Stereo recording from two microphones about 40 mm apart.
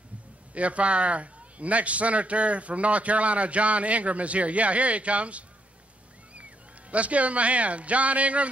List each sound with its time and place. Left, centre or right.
0.6 s a man's voice: right
6.9 s a man's voice: right